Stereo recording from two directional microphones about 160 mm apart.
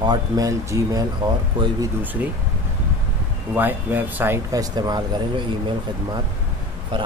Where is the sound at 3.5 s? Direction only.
10° right (ahead or behind).